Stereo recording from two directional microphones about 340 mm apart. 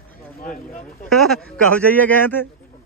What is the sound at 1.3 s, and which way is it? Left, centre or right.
A man's voice, centre.